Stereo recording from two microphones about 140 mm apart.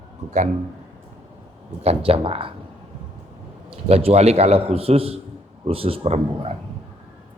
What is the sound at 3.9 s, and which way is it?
A man's voice, 45° right (ahead or behind).